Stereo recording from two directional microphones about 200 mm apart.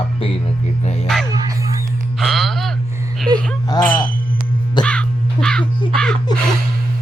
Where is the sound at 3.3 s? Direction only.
20° right (ahead or behind).